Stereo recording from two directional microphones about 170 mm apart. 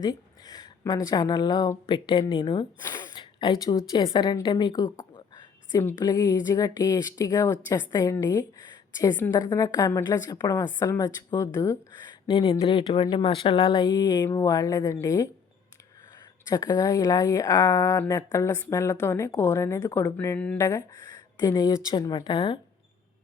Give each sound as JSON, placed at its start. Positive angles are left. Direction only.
{"t": 0.0, "sound": "a woman's voice", "side_deg": 25}
{"t": 16.5, "sound": "a woman's voice", "side_deg": 25}
{"t": 20.6, "sound": "a woman's voice", "side_deg": 20}